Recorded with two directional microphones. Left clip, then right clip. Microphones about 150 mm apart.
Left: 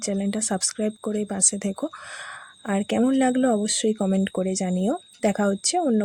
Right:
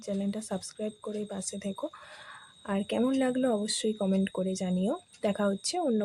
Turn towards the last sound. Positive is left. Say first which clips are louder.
# left 7 dB
turn(degrees=30)  # may be behind; listen again after turning